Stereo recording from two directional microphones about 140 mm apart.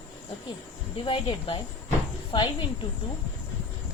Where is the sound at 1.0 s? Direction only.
40° left (ahead or behind).